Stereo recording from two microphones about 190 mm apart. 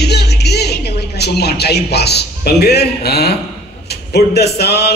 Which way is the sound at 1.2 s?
60° left (ahead or behind).